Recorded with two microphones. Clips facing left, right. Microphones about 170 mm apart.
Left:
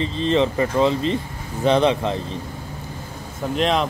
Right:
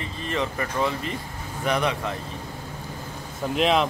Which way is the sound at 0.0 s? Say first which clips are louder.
Left 9 dB; 25° left (ahead or behind).